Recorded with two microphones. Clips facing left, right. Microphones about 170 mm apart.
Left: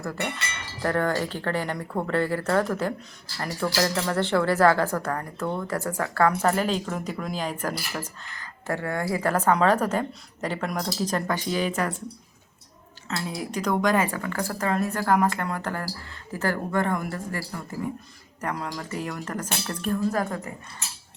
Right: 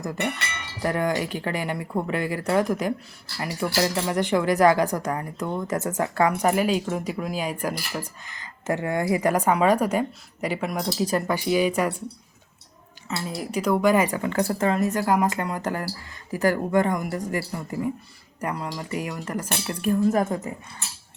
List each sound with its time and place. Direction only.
0.8 s speech: 15° right (ahead or behind)
13.1 s speech: 5° right (ahead or behind)
18.5 s speech: centre (ahead or behind)
18.8 s speech: 10° right (ahead or behind)
20.1 s speech: 20° right (ahead or behind)